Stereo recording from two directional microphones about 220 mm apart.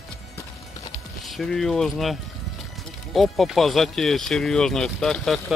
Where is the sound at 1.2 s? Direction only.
Centre (ahead or behind).